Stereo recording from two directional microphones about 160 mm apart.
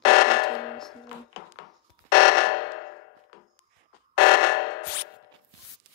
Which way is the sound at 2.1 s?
75° left (ahead or behind).